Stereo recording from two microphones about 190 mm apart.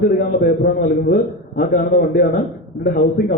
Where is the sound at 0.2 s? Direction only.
55° left (ahead or behind).